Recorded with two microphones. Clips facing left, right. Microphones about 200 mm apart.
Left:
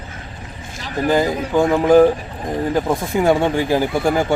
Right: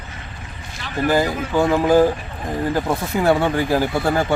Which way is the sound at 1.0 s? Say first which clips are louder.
Left 1 dB; 20° left (ahead or behind).